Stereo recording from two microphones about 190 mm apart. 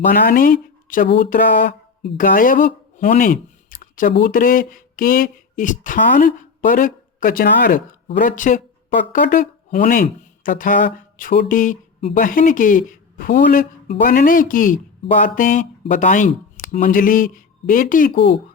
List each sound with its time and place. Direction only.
0.0 s speech: 45° left (ahead or behind)
1.0 s speech: 65° left (ahead or behind)
1.3 s speech: 45° left (ahead or behind)